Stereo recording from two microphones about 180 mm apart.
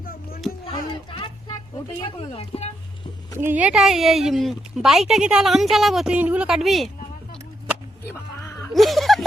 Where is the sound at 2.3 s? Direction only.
35° left (ahead or behind).